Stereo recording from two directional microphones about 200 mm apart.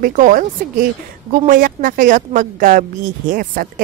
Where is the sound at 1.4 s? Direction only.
45° right (ahead or behind).